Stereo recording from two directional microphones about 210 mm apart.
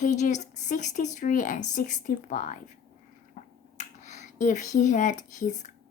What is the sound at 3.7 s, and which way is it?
Speech, 35° left (ahead or behind).